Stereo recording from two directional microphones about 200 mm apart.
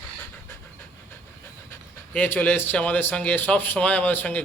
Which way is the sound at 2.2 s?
10° left (ahead or behind).